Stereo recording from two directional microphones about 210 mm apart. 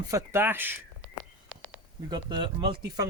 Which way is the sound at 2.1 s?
20° right (ahead or behind).